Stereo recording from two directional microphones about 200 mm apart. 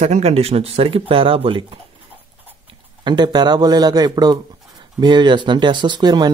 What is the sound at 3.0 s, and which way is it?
Speech, 20° right (ahead or behind).